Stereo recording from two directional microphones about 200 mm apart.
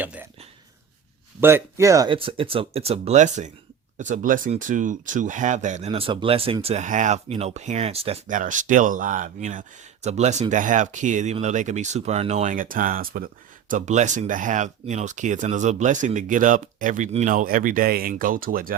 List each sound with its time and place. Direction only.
0.0 s speech: 10° right (ahead or behind)
1.4 s speech: 10° right (ahead or behind); by 18.7 s 45° right (ahead or behind)